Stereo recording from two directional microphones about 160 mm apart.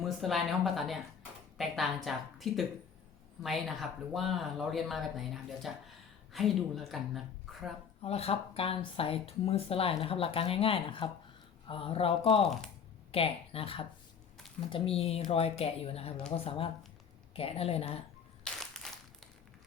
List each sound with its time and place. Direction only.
0.0 s speech: centre (ahead or behind)
8.0 s speech: 40° left (ahead or behind)
18.4 s crushing: centre (ahead or behind)